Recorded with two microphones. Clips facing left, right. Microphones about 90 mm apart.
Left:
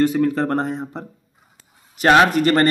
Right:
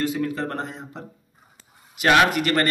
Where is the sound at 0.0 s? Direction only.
45° left (ahead or behind).